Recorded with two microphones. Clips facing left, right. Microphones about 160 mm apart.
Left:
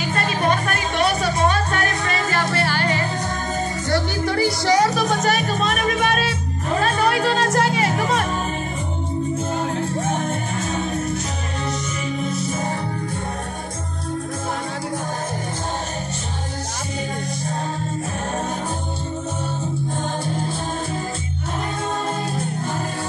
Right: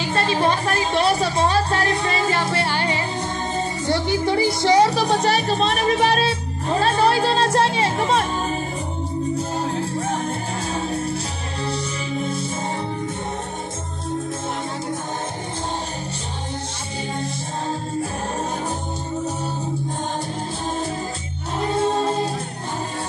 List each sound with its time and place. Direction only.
0.1 s music: 25° right (ahead or behind)
9.6 s music: 35° right (ahead or behind)
21.7 s music: 30° right (ahead or behind)